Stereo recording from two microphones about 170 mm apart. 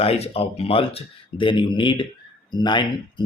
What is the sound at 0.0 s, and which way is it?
Speech, 35° left (ahead or behind).